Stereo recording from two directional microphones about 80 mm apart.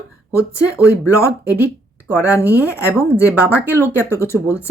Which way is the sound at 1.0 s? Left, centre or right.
Left.